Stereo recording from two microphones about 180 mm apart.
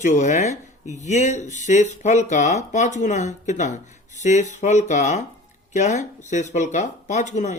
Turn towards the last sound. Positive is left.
turn(degrees=40)  # may be behind; listen again after turning